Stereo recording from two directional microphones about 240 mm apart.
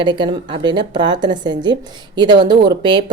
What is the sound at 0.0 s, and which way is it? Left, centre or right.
A woman's voice, centre.